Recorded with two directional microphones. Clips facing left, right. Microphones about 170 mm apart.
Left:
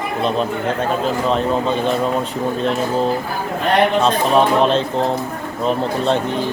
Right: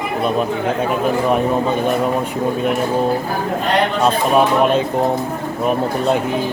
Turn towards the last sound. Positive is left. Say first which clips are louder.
# right 1 dB
turn(degrees=-5)  # may be behind; listen again after turning